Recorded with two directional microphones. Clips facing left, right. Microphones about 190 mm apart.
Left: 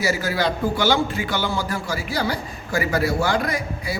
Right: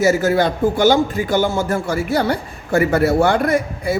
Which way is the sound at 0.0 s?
50° right (ahead or behind).